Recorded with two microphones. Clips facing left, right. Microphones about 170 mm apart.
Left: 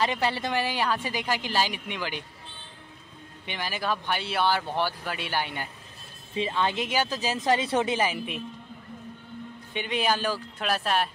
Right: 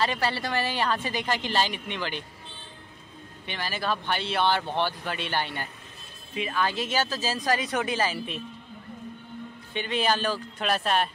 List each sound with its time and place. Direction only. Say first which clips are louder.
0.0 s speech: left 1 dB; 15° left (ahead or behind)
3.4 s speech: even; 15° left (ahead or behind)
6.3 s speech: left 1 dB; 25° left (ahead or behind)
9.8 s speech: right 1 dB; 15° left (ahead or behind)